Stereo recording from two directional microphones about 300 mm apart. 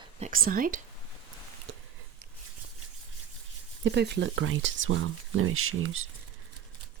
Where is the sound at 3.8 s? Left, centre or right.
Right.